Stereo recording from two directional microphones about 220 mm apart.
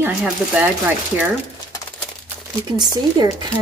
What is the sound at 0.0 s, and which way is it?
Speech, 10° right (ahead or behind).